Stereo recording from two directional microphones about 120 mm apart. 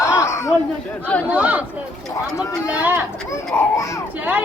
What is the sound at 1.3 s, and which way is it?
Speech, 10° right (ahead or behind).